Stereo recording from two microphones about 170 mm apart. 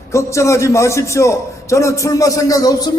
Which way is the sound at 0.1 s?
15° left (ahead or behind).